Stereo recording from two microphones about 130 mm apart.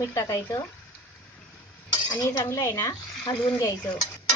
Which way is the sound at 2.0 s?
30° left (ahead or behind).